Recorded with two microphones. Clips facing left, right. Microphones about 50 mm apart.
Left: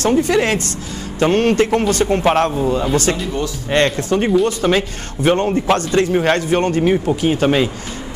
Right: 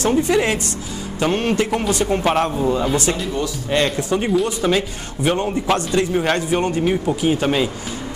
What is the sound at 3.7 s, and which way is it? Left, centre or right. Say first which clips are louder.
A man's voice: left 3 dB; left.